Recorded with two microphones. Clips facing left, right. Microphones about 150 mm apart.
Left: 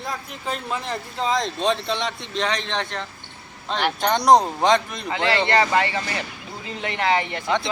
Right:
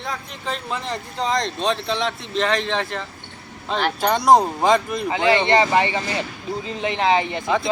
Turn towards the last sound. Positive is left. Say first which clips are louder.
# right 3 dB
turn(degrees=-20)  # may be behind; listen again after turning